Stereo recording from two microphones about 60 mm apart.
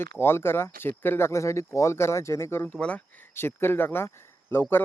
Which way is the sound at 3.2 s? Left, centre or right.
Left.